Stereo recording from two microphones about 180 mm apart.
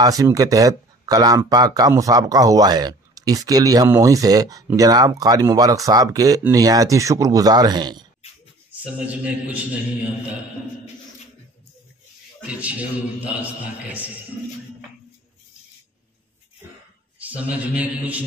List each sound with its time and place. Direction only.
0.0 s speech: 20° right (ahead or behind)
8.8 s a man's voice: 10° right (ahead or behind)
12.4 s a man's voice: 10° right (ahead or behind)
17.2 s a man's voice: 10° right (ahead or behind)